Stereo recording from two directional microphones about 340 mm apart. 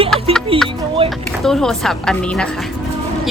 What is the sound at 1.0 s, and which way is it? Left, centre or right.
Speech, centre.